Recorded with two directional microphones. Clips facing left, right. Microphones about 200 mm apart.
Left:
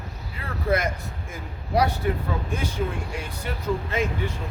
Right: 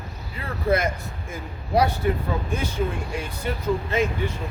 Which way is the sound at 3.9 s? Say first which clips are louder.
Right 3 dB; 25° right (ahead or behind).